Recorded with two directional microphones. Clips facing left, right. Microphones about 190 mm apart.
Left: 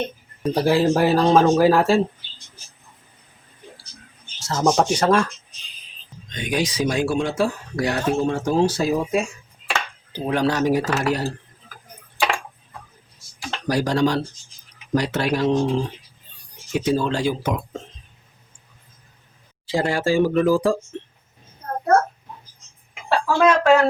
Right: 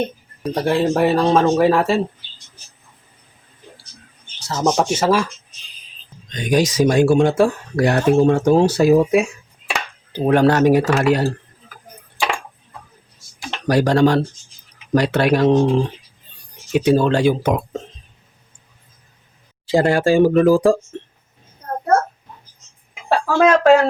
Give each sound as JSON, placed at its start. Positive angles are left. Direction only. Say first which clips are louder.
{"t": 0.4, "sound": "speech", "louder": "even", "side_deg": 0}
{"t": 4.4, "sound": "speech", "louder": "right 1 dB", "side_deg": 0}
{"t": 6.3, "sound": "speech", "louder": "right 6 dB", "side_deg": -40}
{"t": 13.7, "sound": "speech", "louder": "right 5 dB", "side_deg": -60}
{"t": 16.7, "sound": "speech", "louder": "right 6 dB", "side_deg": -65}
{"t": 19.6, "sound": "speech", "louder": "right 6 dB", "side_deg": -50}
{"t": 23.0, "sound": "speech", "louder": "right 2 dB", "side_deg": -45}